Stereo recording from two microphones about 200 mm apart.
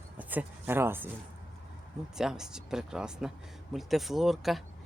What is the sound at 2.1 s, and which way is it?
Speech, 5° right (ahead or behind).